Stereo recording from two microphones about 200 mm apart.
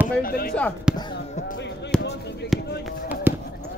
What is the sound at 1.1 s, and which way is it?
Basketball bounce, 55° left (ahead or behind).